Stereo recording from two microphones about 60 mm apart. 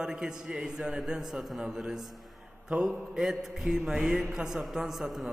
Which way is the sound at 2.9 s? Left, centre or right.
Centre.